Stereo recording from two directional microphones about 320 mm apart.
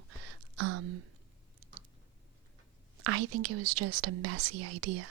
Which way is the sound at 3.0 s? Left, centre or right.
Right.